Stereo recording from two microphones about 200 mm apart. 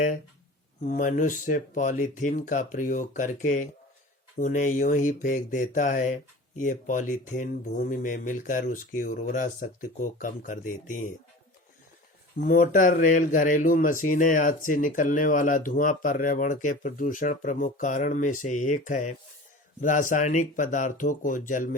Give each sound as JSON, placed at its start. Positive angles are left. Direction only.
{"t": 0.9, "sound": "speech", "side_deg": 40}
{"t": 12.5, "sound": "speech", "side_deg": 45}